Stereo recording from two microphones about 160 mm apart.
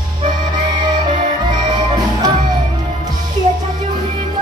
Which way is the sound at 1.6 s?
25° right (ahead or behind).